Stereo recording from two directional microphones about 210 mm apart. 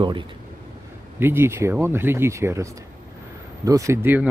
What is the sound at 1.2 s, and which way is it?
Speech, 10° right (ahead or behind).